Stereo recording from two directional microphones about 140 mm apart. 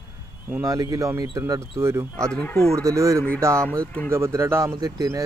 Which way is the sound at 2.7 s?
20° right (ahead or behind).